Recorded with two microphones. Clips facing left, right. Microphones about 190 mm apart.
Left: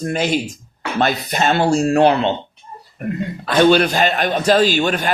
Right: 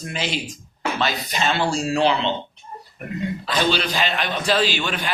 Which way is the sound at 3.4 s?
60° left (ahead or behind).